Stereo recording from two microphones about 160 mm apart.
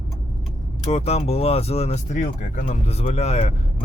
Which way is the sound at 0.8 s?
40° left (ahead or behind).